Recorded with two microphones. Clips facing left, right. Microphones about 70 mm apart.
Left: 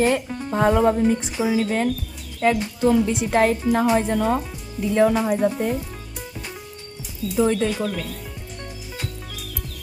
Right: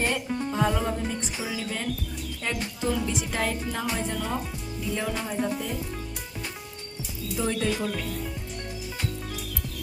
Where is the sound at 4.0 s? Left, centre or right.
Left.